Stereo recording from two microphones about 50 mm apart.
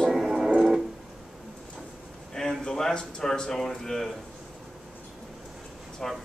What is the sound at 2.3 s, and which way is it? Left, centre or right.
Speech, centre.